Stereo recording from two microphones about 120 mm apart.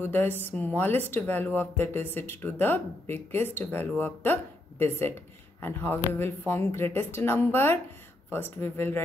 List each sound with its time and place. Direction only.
0.0 s speech: 15° left (ahead or behind)